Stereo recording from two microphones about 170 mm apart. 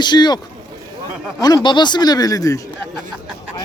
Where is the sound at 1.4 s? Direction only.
25° left (ahead or behind).